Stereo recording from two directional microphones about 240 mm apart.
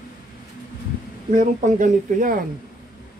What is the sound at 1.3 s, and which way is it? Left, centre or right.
Speech, right.